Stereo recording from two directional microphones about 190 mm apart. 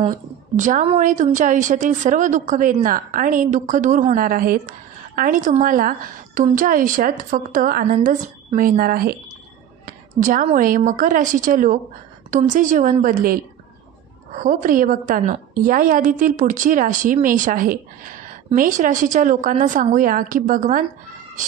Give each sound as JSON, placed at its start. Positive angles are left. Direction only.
{"t": 0.6, "sound": "a woman's voice", "side_deg": -40}